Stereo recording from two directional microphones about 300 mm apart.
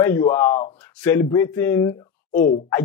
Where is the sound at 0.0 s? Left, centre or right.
Centre.